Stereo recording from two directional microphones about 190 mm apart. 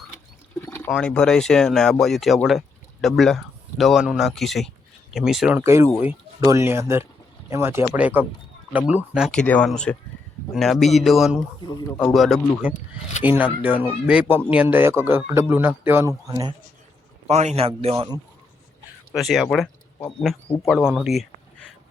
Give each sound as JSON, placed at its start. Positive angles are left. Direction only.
{"t": 0.6, "sound": "a sound", "side_deg": 15}
{"t": 0.9, "sound": "speech", "side_deg": 5}
{"t": 17.2, "sound": "a man's voice", "side_deg": -35}
{"t": 19.1, "sound": "speech", "side_deg": 0}